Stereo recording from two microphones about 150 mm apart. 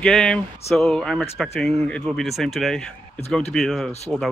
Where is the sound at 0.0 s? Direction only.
5° left (ahead or behind).